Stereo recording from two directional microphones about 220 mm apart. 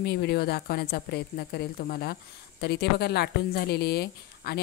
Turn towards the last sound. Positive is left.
turn(degrees=45)  # may be behind; listen again after turning